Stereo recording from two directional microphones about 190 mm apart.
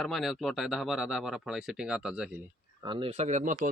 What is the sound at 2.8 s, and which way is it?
Speech, 30° right (ahead or behind).